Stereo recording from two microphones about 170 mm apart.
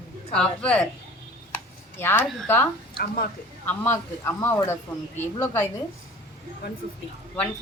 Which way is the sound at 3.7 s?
15° left (ahead or behind).